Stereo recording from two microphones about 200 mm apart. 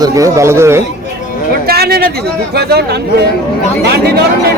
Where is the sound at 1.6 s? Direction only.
50° right (ahead or behind).